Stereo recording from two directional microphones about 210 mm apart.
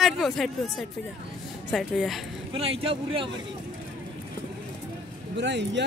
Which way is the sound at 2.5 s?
25° right (ahead or behind).